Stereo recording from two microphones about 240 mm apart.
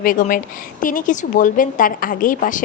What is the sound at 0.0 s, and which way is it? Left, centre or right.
A woman's voice, left.